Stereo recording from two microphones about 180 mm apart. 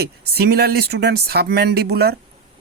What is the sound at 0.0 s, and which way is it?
A man's voice, 60° right (ahead or behind).